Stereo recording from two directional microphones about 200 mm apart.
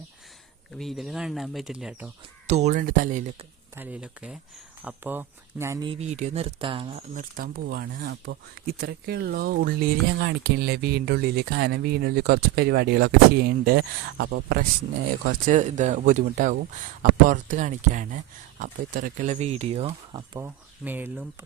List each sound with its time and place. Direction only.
0.8 s speech: centre (ahead or behind)
2.5 s speech: 35° right (ahead or behind)
3.8 s speech: 10° right (ahead or behind)
5.8 s speech: 30° right (ahead or behind)
7.1 s speech: 40° right (ahead or behind)
15.3 s speech: 40° right (ahead or behind); by 20.5 s 20° right (ahead or behind)
20.8 s speech: 10° right (ahead or behind)